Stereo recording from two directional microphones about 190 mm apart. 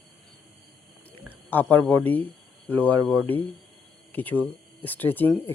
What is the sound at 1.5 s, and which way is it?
Speech, 10° left (ahead or behind).